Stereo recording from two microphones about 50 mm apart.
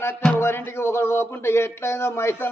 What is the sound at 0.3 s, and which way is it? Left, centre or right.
A man's voice, left.